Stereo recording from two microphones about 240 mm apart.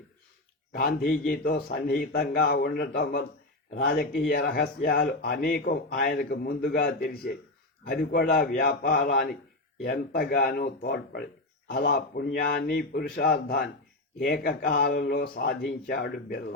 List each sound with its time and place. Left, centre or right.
0.7 s a man's voice: left